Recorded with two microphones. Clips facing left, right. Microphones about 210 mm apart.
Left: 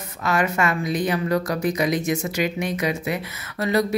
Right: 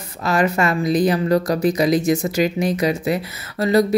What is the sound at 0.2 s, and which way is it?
Speech, 35° right (ahead or behind).